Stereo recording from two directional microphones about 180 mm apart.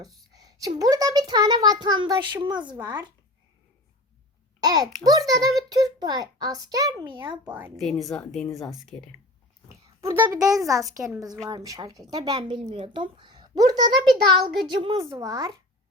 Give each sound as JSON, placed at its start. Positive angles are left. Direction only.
{"t": 0.3, "sound": "speech", "side_deg": -20}
{"t": 4.6, "sound": "speech", "side_deg": -20}
{"t": 7.4, "sound": "a child's voice", "side_deg": -10}
{"t": 7.8, "sound": "speech", "side_deg": 0}
{"t": 8.4, "sound": "speech", "side_deg": 20}
{"t": 8.7, "sound": "speech", "side_deg": 5}
{"t": 10.0, "sound": "a child's voice", "side_deg": -15}